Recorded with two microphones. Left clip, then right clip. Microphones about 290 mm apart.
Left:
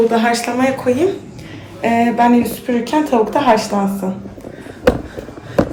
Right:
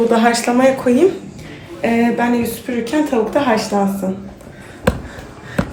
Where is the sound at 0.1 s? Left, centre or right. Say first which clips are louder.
Right 2 dB; centre.